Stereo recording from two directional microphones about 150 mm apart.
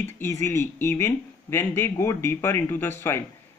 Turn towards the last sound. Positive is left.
turn(degrees=15)  # may be behind; listen again after turning